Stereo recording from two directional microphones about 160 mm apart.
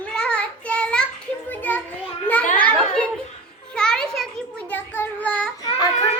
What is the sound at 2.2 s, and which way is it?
Children playing, 10° left (ahead or behind).